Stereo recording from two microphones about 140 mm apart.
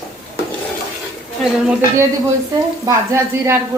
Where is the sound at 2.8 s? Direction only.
20° right (ahead or behind).